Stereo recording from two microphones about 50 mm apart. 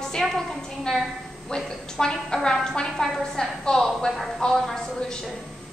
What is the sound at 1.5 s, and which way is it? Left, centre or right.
A woman's voice, centre.